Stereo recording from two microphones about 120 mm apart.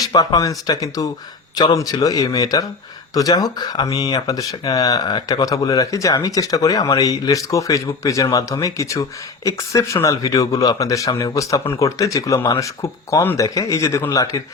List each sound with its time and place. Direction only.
0.0 s speech: 35° left (ahead or behind)